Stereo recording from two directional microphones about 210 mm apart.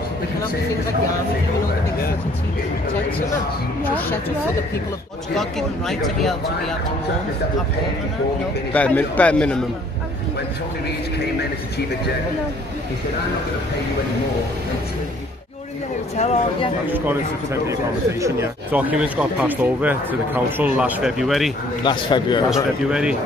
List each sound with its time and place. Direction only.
5.4 s speech: centre (ahead or behind)
8.7 s a man's voice: 5° left (ahead or behind)
16.2 s speech: 30° left (ahead or behind)
16.8 s speech: 10° right (ahead or behind)
18.2 s speech: 10° right (ahead or behind)
21.8 s a man's voice: 20° left (ahead or behind)
22.5 s speech: 5° right (ahead or behind)